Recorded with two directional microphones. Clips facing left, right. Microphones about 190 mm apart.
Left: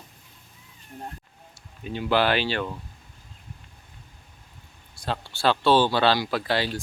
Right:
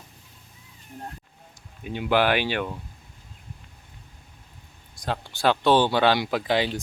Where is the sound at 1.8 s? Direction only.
15° right (ahead or behind).